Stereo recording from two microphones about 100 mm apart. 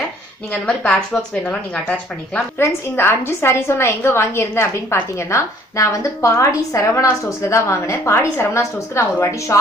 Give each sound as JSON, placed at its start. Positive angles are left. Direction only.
{"t": 0.5, "sound": "a woman's voice", "side_deg": 10}
{"t": 2.6, "sound": "a woman's voice", "side_deg": 25}